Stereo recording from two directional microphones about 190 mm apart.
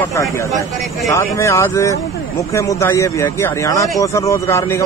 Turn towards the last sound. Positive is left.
turn(degrees=15)  # may be behind; listen again after turning